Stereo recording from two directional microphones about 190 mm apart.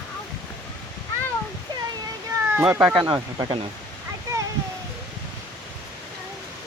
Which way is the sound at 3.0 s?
20° right (ahead or behind).